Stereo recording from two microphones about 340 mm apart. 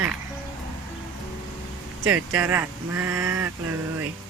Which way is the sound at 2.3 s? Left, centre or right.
Centre.